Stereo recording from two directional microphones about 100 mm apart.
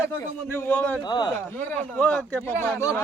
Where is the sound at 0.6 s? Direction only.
20° left (ahead or behind).